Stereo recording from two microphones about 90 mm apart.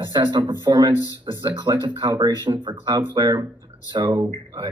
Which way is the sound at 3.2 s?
55° right (ahead or behind).